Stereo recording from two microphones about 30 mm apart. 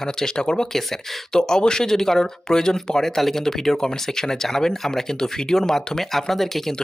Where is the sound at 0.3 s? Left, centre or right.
Left.